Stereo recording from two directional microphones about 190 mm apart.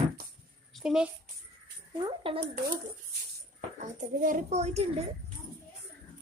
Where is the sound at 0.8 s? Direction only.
5° right (ahead or behind).